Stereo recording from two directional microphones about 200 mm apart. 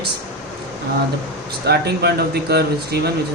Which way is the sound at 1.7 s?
55° right (ahead or behind).